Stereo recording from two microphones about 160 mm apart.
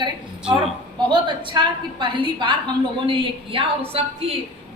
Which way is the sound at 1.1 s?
30° right (ahead or behind).